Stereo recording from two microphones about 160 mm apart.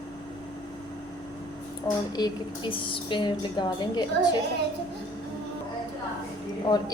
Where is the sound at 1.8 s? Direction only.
25° left (ahead or behind).